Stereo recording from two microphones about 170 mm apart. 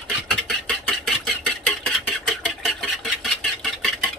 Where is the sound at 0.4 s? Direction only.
5° left (ahead or behind).